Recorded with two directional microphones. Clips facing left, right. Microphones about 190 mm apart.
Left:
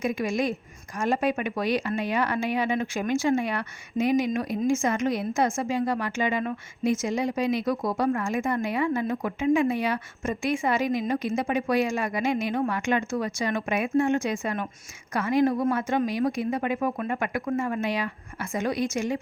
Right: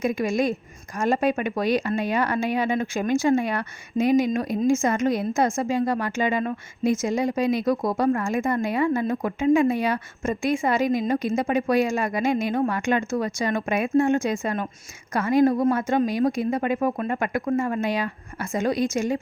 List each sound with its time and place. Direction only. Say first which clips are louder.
0.0 s a woman's voice: right 3 dB; 45° right (ahead or behind)